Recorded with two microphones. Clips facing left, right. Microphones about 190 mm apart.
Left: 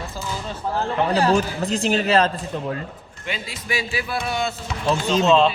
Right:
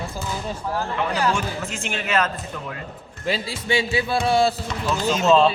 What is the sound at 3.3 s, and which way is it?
Speech, 30° right (ahead or behind).